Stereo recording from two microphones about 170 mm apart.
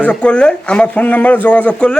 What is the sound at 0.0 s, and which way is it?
Speech, 5° left (ahead or behind).